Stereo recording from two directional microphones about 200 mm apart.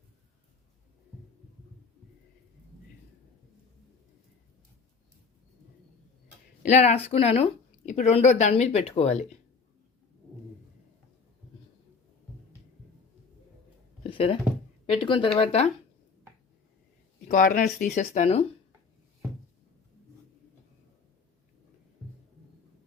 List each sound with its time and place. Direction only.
6.6 s speech: 35° left (ahead or behind)
14.0 s a sound: 30° left (ahead or behind)
14.8 s speech: 25° left (ahead or behind)
17.2 s speech: 40° left (ahead or behind)